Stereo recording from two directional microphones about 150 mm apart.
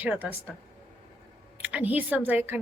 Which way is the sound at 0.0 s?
10° right (ahead or behind).